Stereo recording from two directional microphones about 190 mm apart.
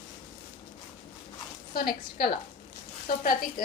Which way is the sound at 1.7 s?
50° left (ahead or behind).